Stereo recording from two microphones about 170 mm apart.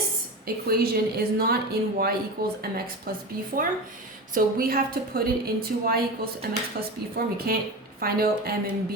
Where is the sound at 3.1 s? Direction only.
60° right (ahead or behind).